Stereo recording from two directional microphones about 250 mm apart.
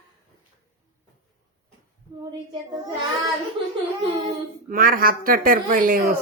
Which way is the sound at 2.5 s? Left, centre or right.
Centre.